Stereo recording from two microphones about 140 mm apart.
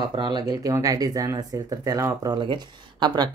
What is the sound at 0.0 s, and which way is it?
Speech, 30° right (ahead or behind).